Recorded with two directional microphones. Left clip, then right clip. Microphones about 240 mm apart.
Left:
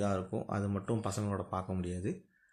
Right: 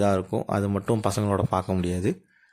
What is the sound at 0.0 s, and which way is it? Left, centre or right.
Speech, right.